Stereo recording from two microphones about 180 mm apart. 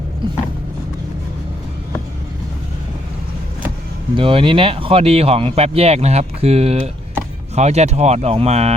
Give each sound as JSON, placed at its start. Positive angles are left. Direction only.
{"t": 4.1, "sound": "speech", "side_deg": -30}